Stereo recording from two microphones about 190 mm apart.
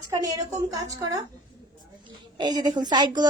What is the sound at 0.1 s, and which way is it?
Speech, 20° right (ahead or behind).